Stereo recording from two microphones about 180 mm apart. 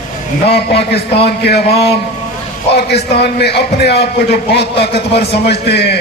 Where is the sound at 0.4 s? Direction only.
65° left (ahead or behind).